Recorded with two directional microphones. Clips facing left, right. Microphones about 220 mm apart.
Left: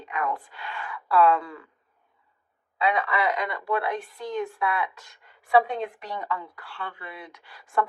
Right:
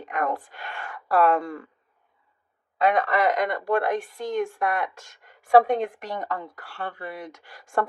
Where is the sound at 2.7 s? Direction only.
45° right (ahead or behind).